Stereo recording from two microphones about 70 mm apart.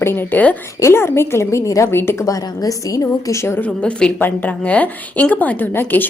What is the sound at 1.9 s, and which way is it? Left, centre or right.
Speech, left.